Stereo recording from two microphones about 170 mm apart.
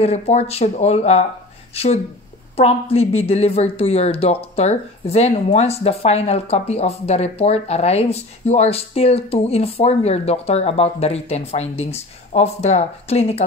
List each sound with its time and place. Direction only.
0.0 s speech: 40° left (ahead or behind)